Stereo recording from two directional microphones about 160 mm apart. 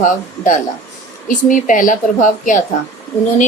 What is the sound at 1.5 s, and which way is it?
A woman's voice, 55° left (ahead or behind).